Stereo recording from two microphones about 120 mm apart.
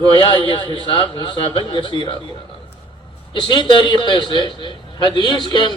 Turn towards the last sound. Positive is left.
turn(degrees=35)  # may be behind; listen again after turning